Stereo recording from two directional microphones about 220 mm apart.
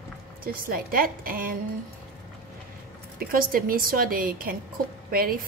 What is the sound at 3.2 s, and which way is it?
A woman's voice, 40° right (ahead or behind).